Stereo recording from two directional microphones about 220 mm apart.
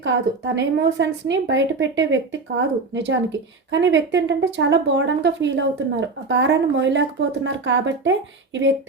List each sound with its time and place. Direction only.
0.0 s speech: 55° right (ahead or behind)